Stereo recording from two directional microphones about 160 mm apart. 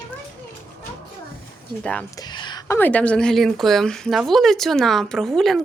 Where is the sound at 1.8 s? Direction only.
10° left (ahead or behind).